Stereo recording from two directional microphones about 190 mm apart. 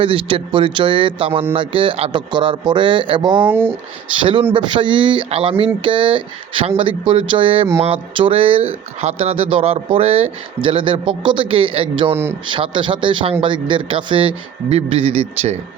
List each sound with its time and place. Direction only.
0.0 s speech: 30° right (ahead or behind)
3.4 s speech: 10° right (ahead or behind)
4.2 s speech: 25° right (ahead or behind)